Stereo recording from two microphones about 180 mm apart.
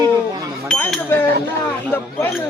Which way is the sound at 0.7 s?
5° left (ahead or behind).